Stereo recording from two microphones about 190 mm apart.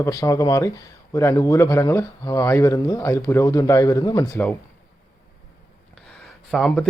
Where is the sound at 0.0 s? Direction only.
15° left (ahead or behind).